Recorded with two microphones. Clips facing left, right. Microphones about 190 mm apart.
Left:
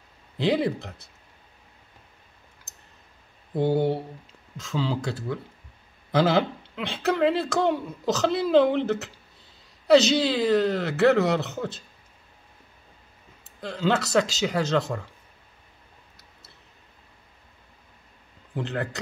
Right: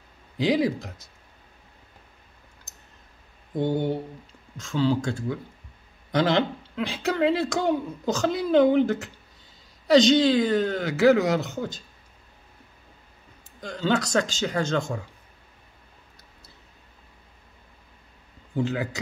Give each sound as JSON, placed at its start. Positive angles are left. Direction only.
{"t": 3.5, "sound": "a sound", "side_deg": 30}
{"t": 4.6, "sound": "speech", "side_deg": 5}
{"t": 13.6, "sound": "speech", "side_deg": 5}
{"t": 18.5, "sound": "speech", "side_deg": 0}